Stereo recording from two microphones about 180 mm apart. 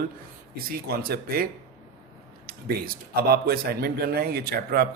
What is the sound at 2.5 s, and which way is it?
A man's voice, 55° right (ahead or behind).